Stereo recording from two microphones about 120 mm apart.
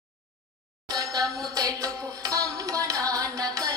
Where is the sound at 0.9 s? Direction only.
30° right (ahead or behind).